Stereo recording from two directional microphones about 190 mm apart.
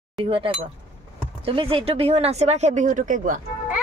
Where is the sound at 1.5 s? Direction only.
30° right (ahead or behind); by 3.4 s 45° right (ahead or behind).